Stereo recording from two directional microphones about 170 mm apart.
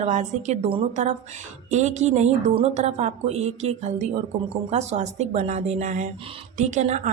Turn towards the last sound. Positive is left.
turn(degrees=-45)  # may be behind; listen again after turning